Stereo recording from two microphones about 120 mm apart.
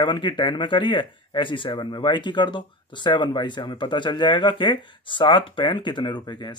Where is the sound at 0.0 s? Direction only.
45° left (ahead or behind).